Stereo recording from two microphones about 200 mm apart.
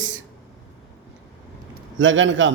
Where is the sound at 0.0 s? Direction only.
70° right (ahead or behind).